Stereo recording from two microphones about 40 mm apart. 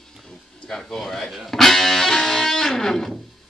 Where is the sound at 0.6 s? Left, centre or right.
Centre.